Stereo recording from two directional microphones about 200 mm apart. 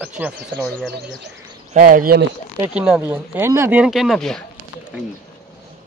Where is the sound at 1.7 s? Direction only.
40° right (ahead or behind).